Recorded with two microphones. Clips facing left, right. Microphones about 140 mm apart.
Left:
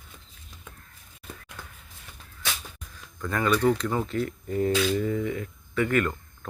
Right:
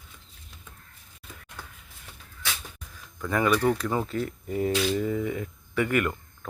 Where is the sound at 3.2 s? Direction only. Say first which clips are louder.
Right 1 dB; 10° right (ahead or behind).